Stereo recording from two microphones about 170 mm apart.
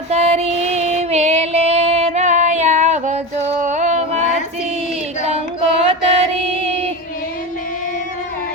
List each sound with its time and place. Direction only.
0.1 s female singing: 40° right (ahead or behind)
5.3 s child singing: 35° right (ahead or behind)
6.4 s music: 35° right (ahead or behind)